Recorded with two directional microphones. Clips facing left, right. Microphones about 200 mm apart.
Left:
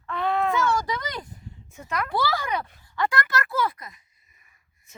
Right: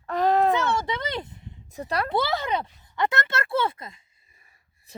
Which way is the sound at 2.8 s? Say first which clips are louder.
Even; 20° right (ahead or behind).